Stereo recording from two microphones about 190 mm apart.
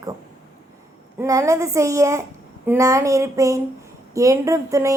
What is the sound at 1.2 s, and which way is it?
Speech, 15° right (ahead or behind).